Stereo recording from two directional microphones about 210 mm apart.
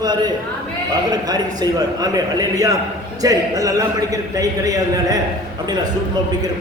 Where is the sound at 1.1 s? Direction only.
20° right (ahead or behind).